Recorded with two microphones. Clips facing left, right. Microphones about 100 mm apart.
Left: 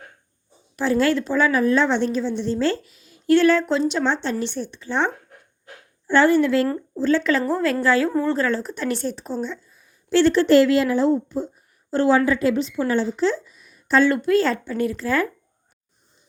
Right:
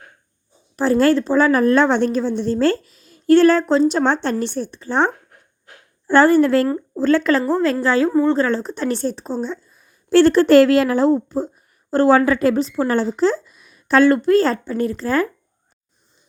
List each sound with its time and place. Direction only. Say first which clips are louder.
0.8 s a woman's voice: right 4 dB; 40° right (ahead or behind)
7.3 s a woman's voice: right 3 dB; 25° right (ahead or behind)
9.7 s a woman's voice: right 5 dB; 50° right (ahead or behind)
13.6 s a sound: right 4 dB; 70° right (ahead or behind)
14.1 s a woman's voice: right 4 dB; 40° right (ahead or behind)